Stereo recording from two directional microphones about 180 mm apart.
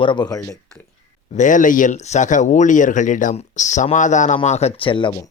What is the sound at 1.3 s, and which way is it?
Speech, 45° left (ahead or behind).